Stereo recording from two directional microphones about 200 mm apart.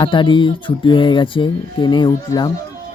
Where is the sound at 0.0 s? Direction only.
25° left (ahead or behind).